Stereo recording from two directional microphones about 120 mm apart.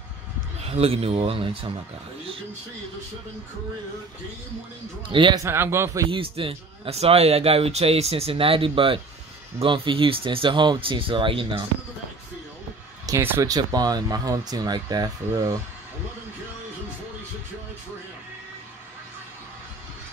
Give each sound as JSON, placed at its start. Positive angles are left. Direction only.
{"t": 0.6, "sound": "speech", "side_deg": -55}
{"t": 5.1, "sound": "speech", "side_deg": -45}
{"t": 5.4, "sound": "a man's voice", "side_deg": -20}
{"t": 6.0, "sound": "speech", "side_deg": -50}
{"t": 13.1, "sound": "speech", "side_deg": -30}